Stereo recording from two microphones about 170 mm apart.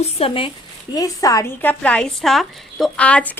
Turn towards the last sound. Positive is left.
turn(degrees=5)  # may be behind; listen again after turning